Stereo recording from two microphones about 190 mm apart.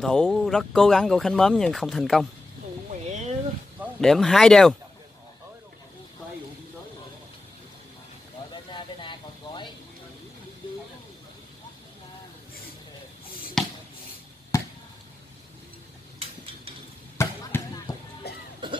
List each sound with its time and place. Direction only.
0.0 s speech: 5° left (ahead or behind)
2.9 s a sound: 40° right (ahead or behind)
4.0 s speech: centre (ahead or behind)
8.7 s a sound: 25° left (ahead or behind)
13.6 s a sound: centre (ahead or behind)
14.5 s chop: 15° left (ahead or behind)
17.2 s basketball bounce: 15° left (ahead or behind)
18.3 s cough: 60° left (ahead or behind)
18.6 s cough: 25° right (ahead or behind)